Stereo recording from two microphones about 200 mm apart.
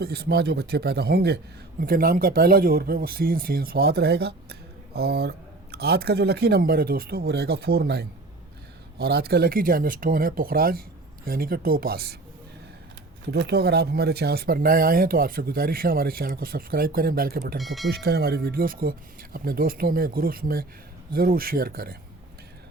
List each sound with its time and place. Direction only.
0.0 s speech: 55° right (ahead or behind)
13.3 s speech: 50° right (ahead or behind)
17.6 s speech: centre (ahead or behind)
17.8 s speech: 50° right (ahead or behind)